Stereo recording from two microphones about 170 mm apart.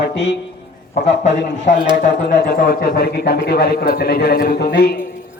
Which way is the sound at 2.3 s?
55° left (ahead or behind).